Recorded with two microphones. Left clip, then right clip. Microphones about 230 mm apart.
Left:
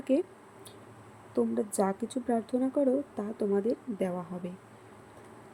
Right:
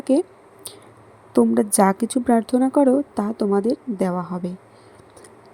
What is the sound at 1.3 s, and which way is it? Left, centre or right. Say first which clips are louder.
A woman's voice: right 12 dB; right.